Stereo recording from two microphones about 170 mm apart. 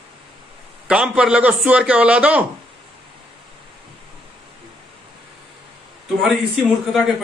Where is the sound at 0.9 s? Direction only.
5° right (ahead or behind).